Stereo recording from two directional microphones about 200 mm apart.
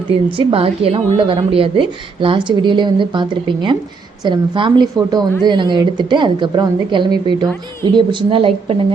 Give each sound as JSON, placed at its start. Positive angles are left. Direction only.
{"t": 0.3, "sound": "a woman's voice", "side_deg": -25}